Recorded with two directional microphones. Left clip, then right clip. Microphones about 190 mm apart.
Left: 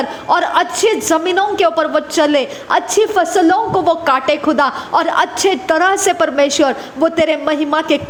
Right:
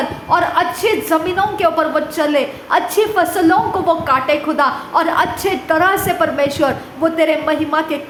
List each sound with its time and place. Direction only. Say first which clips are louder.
0.3 s a woman's voice: left 1 dB; 40° left (ahead or behind)